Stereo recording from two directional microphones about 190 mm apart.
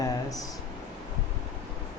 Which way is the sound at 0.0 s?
20° left (ahead or behind).